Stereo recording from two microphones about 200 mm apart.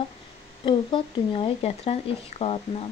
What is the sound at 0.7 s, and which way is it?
Speech, 25° left (ahead or behind).